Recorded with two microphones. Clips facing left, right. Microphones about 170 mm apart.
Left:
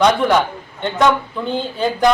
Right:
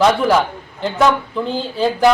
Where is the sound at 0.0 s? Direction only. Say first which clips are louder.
Even; 5° right (ahead or behind).